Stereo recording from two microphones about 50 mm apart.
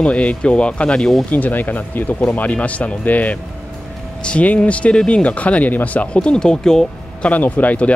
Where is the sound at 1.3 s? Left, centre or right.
Left.